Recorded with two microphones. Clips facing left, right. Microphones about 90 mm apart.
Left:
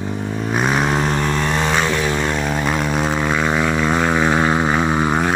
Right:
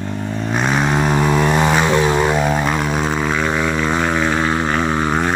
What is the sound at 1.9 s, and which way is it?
Fixed-wing aircraft, 25° right (ahead or behind).